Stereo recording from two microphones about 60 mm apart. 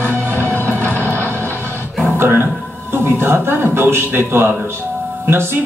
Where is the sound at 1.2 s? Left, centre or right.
Left.